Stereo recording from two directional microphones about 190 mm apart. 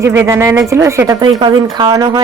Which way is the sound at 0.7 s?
15° right (ahead or behind).